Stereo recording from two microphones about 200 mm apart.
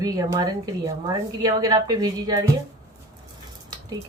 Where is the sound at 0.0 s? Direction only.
20° right (ahead or behind).